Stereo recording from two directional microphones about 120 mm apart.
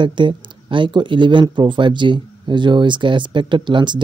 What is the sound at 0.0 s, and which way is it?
Speech, 40° right (ahead or behind).